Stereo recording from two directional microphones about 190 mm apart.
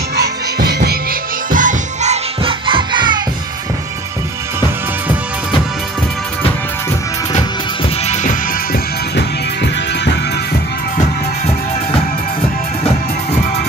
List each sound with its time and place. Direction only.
0.7 s music: 55° right (ahead or behind)
1.5 s music: 45° right (ahead or behind)
2.4 s music: 25° right (ahead or behind)
8.1 s music: 40° left (ahead or behind)
9.1 s music: 65° left (ahead or behind)